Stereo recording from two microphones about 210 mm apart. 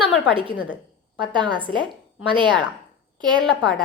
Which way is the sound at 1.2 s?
20° right (ahead or behind).